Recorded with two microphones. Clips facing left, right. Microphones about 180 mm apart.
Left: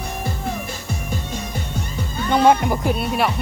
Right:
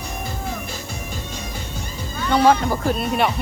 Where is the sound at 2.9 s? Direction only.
5° left (ahead or behind).